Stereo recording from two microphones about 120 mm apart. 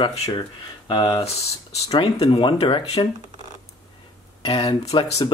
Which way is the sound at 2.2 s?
45° left (ahead or behind).